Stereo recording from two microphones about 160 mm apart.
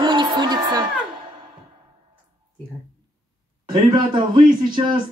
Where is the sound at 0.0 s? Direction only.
30° right (ahead or behind).